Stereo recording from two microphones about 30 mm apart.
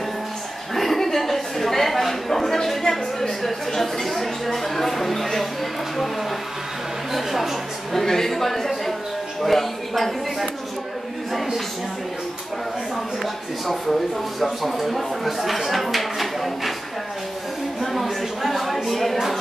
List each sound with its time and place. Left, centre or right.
0.7 s a sound: centre
7.1 s speech: centre
7.9 s a woman's voice: centre
13.2 s a woman's voice: centre
17.9 s speech: centre